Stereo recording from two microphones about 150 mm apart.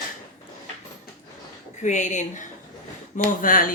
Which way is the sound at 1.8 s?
55° left (ahead or behind).